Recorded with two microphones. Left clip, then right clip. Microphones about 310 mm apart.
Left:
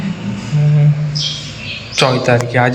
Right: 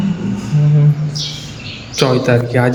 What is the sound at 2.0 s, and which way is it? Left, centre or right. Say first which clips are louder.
Speech: left 1 dB; centre.